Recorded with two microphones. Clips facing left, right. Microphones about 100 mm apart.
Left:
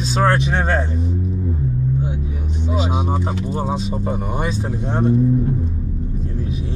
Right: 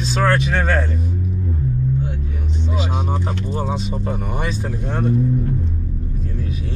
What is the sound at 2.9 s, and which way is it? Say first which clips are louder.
Speech: left 2 dB; 5° left (ahead or behind).